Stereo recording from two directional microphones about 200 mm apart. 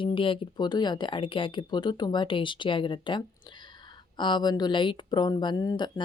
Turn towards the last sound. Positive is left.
turn(degrees=20)  # may be behind; listen again after turning